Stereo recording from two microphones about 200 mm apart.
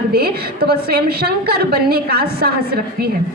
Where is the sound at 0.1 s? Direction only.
50° right (ahead or behind).